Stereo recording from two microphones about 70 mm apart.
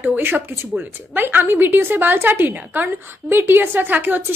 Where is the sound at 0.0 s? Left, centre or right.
Right.